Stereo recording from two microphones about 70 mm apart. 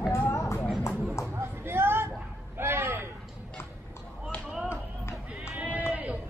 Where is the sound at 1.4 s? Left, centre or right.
Right.